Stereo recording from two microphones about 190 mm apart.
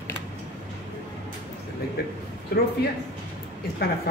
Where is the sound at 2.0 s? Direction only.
55° left (ahead or behind).